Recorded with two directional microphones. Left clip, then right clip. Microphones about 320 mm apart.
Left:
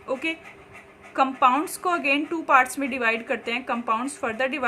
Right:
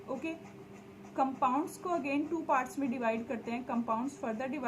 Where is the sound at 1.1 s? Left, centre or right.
Left.